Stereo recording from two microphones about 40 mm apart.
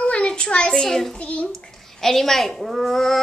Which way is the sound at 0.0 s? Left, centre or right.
Left.